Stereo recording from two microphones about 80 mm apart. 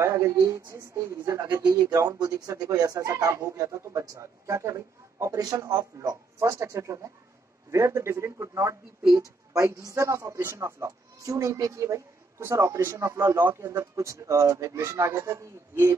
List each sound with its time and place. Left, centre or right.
0.0 s speech: right
1.6 s speech: right